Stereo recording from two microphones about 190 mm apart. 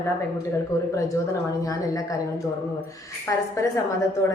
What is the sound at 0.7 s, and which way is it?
A woman's voice, 15° left (ahead or behind).